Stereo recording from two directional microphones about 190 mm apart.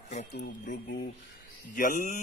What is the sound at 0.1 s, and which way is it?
Speech, 40° left (ahead or behind).